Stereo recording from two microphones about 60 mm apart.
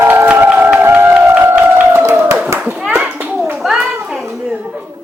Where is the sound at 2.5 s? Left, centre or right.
Right.